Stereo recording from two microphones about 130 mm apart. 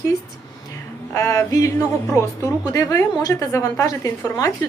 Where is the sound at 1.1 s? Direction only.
25° left (ahead or behind).